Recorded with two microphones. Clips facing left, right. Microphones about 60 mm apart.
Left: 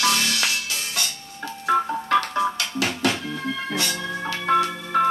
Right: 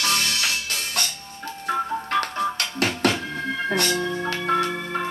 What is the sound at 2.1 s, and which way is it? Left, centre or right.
Music, right.